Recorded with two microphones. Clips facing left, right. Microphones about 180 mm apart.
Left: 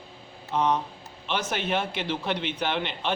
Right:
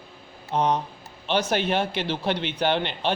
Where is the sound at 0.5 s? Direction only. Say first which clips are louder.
Right 2 dB; 40° right (ahead or behind).